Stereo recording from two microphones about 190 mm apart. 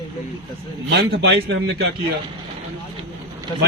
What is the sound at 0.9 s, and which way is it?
A man's voice, 65° right (ahead or behind).